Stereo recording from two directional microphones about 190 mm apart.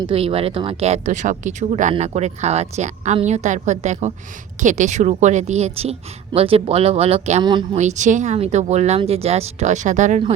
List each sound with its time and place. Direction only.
0.0 s speech: 30° right (ahead or behind)
7.4 s speech: 25° right (ahead or behind)
7.8 s speech: 40° right (ahead or behind)